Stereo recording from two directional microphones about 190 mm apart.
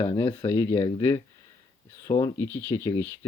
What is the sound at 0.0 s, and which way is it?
Speech, 25° left (ahead or behind).